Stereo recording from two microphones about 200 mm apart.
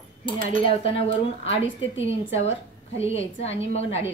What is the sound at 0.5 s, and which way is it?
A woman's voice, 25° left (ahead or behind).